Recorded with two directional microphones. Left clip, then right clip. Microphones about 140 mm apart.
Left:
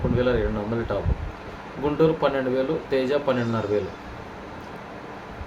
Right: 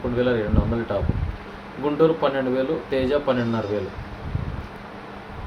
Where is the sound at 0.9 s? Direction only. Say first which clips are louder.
Right 2 dB; 5° left (ahead or behind).